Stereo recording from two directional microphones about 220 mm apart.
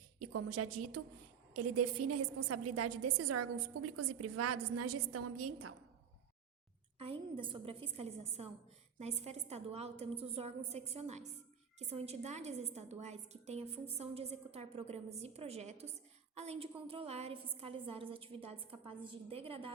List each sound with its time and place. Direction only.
0.2 s a woman's voice: 90° right
7.0 s a woman's voice: 25° right (ahead or behind)